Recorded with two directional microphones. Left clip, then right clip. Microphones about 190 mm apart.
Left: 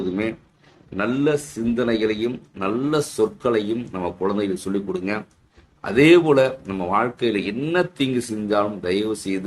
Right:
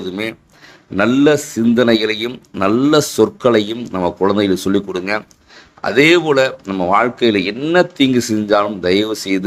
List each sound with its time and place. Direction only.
0.9 s a man's voice: 45° right (ahead or behind)